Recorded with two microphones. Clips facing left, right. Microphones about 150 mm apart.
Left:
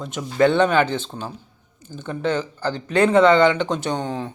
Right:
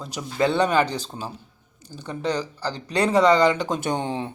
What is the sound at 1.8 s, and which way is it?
Speech, 35° right (ahead or behind).